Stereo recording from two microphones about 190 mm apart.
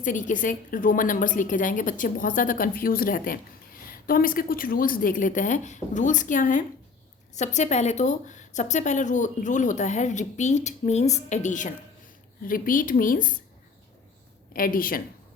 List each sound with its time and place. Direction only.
0.0 s a woman's voice: 45° left (ahead or behind)
14.5 s a woman's voice: 45° left (ahead or behind)